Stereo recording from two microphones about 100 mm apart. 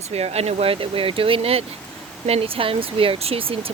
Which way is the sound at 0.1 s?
90° right.